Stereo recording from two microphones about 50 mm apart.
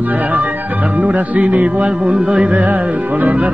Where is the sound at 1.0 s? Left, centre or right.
Right.